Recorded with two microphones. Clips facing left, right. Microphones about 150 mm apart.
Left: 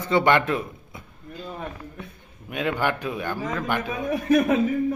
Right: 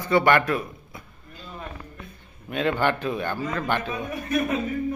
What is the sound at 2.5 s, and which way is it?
A man's voice, 10° left (ahead or behind).